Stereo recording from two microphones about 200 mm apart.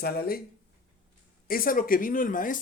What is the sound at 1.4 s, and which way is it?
Speech, 45° left (ahead or behind).